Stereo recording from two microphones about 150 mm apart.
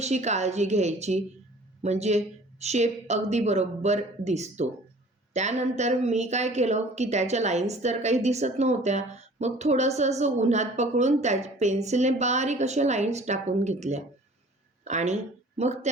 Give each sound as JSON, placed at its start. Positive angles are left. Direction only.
{"t": 0.0, "sound": "a woman's voice", "side_deg": -50}